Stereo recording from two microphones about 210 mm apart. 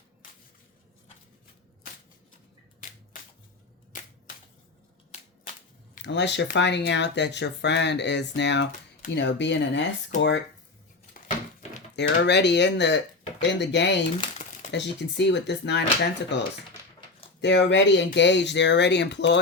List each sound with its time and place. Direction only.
5.9 s speech: 55° left (ahead or behind)
11.9 s speech: 55° left (ahead or behind)
14.2 s crumpling: 35° left (ahead or behind)
14.7 s speech: 55° left (ahead or behind)